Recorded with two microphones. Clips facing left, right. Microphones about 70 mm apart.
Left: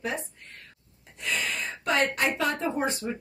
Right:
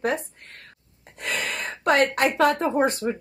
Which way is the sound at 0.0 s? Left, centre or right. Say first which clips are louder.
Right 7 dB; right.